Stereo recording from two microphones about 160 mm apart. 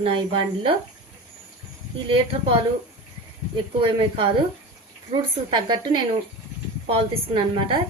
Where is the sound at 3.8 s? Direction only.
35° right (ahead or behind).